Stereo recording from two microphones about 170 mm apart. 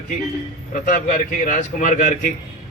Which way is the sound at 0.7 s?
50° left (ahead or behind).